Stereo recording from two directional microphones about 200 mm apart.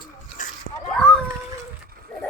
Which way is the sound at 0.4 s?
40° left (ahead or behind).